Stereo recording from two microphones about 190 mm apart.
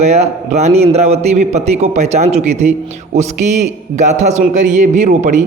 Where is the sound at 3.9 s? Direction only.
40° right (ahead or behind).